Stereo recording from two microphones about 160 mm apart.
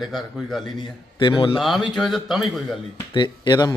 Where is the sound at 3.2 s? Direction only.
25° left (ahead or behind).